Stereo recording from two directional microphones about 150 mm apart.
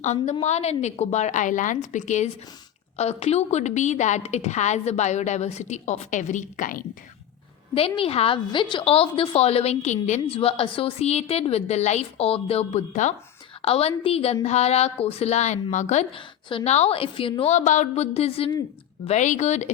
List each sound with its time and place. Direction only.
0.0 s a woman's voice: 50° left (ahead or behind)
7.7 s a woman's voice: 40° left (ahead or behind)
13.6 s a woman's voice: 40° left (ahead or behind)
16.1 s a woman's voice: 35° left (ahead or behind)
19.0 s a woman's voice: 50° left (ahead or behind)